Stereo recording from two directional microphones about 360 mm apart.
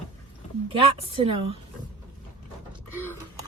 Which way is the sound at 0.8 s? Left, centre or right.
Centre.